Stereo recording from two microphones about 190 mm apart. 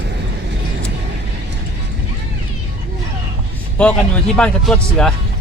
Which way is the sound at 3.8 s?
5° left (ahead or behind).